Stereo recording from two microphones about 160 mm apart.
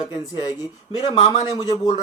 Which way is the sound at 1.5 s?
25° left (ahead or behind).